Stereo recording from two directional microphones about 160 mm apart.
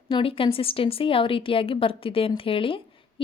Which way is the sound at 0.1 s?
35° left (ahead or behind).